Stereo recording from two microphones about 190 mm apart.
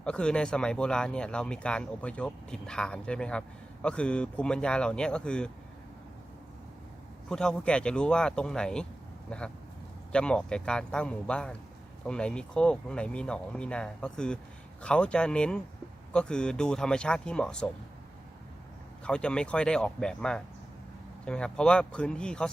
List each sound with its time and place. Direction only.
0.0 s speech: 5° left (ahead or behind)
7.3 s speech: 5° left (ahead or behind)
10.1 s speech: 5° left (ahead or behind)
19.0 s speech: 5° left (ahead or behind)